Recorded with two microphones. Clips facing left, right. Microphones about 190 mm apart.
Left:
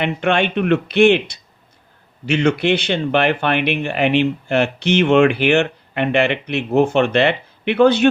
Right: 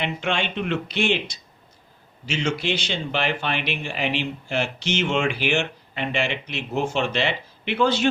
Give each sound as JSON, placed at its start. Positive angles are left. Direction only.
{"t": 0.0, "sound": "speech", "side_deg": 60}